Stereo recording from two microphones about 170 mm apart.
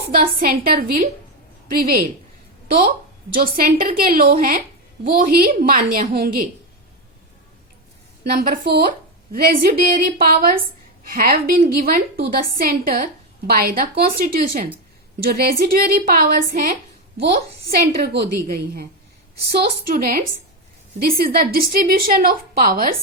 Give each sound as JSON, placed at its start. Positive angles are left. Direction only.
{"t": 0.1, "sound": "a woman's voice", "side_deg": -60}
{"t": 8.2, "sound": "a woman's voice", "side_deg": -65}
{"t": 18.0, "sound": "a woman's voice", "side_deg": -70}